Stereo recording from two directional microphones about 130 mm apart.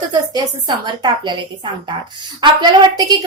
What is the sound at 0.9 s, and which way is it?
Speech, 35° right (ahead or behind).